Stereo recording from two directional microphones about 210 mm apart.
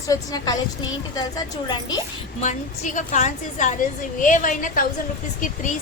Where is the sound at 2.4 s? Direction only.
35° left (ahead or behind).